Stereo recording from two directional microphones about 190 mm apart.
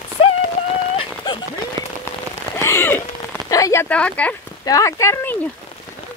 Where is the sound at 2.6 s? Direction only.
15° left (ahead or behind).